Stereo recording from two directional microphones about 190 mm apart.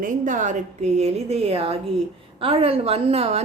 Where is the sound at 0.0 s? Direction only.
45° right (ahead or behind).